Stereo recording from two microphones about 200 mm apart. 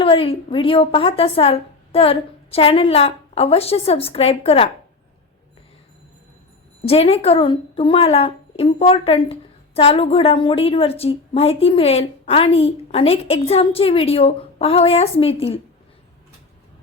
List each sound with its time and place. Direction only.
0.0 s a woman's voice: 25° left (ahead or behind)
6.8 s a woman's voice: 30° left (ahead or behind)